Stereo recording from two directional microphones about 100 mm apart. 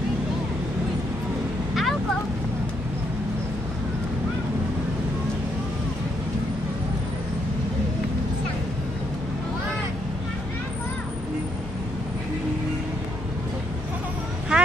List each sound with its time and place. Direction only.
14.5 s vehicle: 10° right (ahead or behind)